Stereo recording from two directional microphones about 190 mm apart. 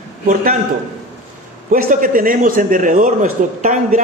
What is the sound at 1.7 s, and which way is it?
A man's voice, 45° right (ahead or behind).